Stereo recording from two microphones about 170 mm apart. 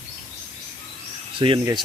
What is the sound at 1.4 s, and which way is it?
Speech, 30° right (ahead or behind).